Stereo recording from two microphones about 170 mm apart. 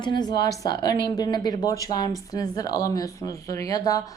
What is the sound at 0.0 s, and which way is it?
Speech, 25° left (ahead or behind).